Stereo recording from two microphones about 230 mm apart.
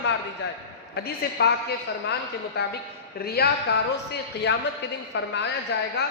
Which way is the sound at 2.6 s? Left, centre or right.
Left.